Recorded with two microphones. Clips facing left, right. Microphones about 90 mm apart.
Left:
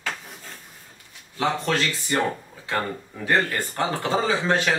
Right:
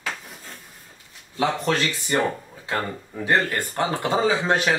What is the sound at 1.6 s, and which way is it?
Speech, 20° right (ahead or behind).